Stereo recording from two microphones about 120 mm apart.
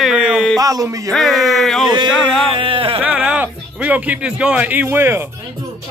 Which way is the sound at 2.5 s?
45° right (ahead or behind).